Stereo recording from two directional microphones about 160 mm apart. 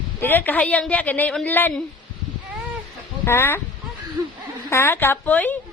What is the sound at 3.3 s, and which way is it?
Speech, 15° left (ahead or behind).